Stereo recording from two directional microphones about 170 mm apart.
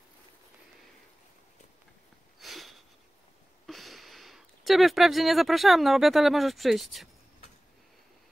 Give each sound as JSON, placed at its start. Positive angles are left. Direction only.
{"t": 2.4, "sound": "sniff", "side_deg": 0}
{"t": 3.6, "sound": "speech", "side_deg": 0}